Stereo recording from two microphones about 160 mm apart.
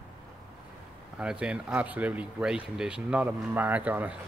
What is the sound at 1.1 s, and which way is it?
Speech, 5° right (ahead or behind).